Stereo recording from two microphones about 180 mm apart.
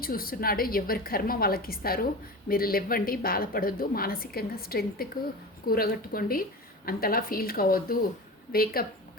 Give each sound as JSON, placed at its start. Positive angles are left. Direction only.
{"t": 0.0, "sound": "a woman's voice", "side_deg": 55}